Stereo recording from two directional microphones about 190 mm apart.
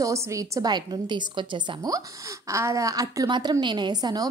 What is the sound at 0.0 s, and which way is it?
A woman's voice, 15° right (ahead or behind).